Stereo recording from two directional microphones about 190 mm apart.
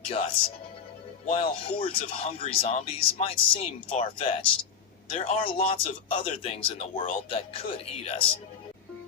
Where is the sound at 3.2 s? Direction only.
30° left (ahead or behind).